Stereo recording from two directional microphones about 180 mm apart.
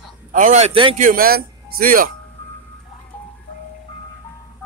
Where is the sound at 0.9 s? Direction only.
50° right (ahead or behind).